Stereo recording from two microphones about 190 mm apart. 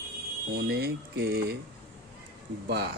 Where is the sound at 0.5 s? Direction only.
55° right (ahead or behind).